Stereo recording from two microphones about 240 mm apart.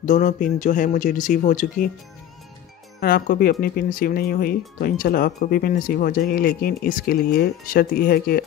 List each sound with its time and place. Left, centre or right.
0.0 s speech: left
3.0 s speech: left